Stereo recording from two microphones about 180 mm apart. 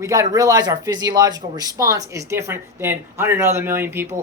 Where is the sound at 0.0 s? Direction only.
20° right (ahead or behind).